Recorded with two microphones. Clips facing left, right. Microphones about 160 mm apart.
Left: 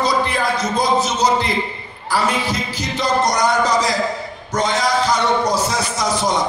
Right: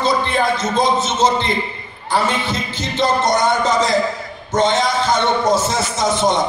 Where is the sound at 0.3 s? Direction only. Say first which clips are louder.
Right 2 dB; 25° right (ahead or behind).